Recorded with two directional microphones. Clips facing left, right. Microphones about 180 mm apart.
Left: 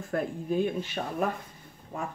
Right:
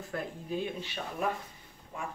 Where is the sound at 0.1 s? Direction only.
50° left (ahead or behind).